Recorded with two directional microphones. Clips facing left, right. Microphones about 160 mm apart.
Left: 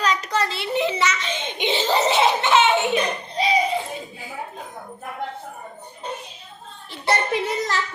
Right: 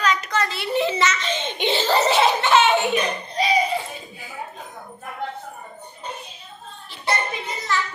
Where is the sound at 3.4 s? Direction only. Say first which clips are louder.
Even; 25° left (ahead or behind).